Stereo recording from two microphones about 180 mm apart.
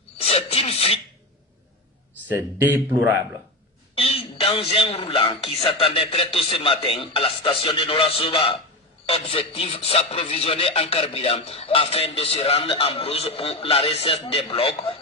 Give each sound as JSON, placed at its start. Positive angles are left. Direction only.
{"t": 0.2, "sound": "speech", "side_deg": 35}
{"t": 2.2, "sound": "speech", "side_deg": -10}
{"t": 3.9, "sound": "a man's voice", "side_deg": 30}